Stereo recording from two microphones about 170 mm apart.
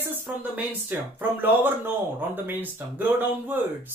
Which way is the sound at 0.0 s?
10° right (ahead or behind).